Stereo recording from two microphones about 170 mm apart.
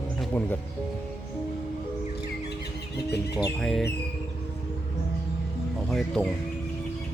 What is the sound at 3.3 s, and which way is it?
Music, 20° left (ahead or behind).